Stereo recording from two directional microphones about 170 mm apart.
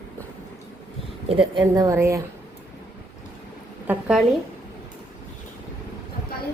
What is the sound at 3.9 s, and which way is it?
Speech, 5° right (ahead or behind).